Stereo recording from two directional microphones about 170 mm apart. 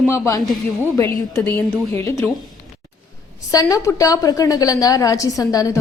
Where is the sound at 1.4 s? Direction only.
10° left (ahead or behind).